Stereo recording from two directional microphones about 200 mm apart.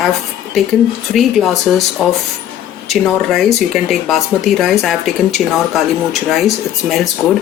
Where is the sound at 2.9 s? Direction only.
Centre (ahead or behind).